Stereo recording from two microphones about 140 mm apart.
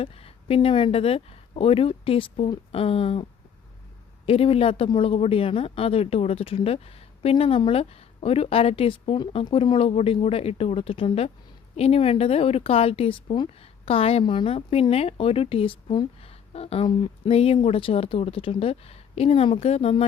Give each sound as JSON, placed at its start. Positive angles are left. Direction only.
{"t": 0.0, "sound": "speech", "side_deg": 45}
{"t": 4.3, "sound": "speech", "side_deg": 45}
{"t": 16.5, "sound": "speech", "side_deg": 45}